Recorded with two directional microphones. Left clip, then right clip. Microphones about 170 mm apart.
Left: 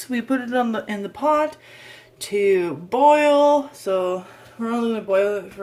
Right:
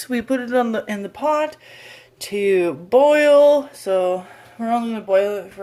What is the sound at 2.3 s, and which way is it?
Speech, 40° right (ahead or behind).